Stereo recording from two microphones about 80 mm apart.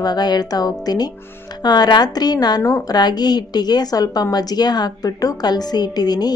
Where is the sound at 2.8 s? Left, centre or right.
Left.